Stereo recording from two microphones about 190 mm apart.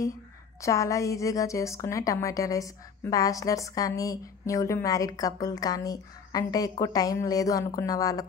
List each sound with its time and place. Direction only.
0.6 s a woman's voice: 15° left (ahead or behind)